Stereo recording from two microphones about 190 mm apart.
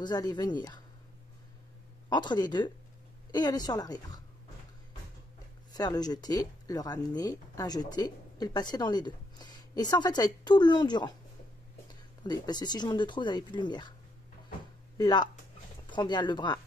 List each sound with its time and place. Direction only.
0.0 s speech: 20° left (ahead or behind)
2.0 s speech: 20° left (ahead or behind)
5.7 s speech: 20° left (ahead or behind)
12.2 s speech: 20° left (ahead or behind)
15.0 s speech: 20° left (ahead or behind)